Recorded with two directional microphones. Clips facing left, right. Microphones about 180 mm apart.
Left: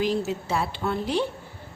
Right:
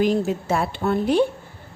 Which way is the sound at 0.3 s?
50° right (ahead or behind).